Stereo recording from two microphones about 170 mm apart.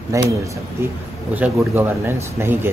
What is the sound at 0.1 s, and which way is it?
Speech, 20° right (ahead or behind).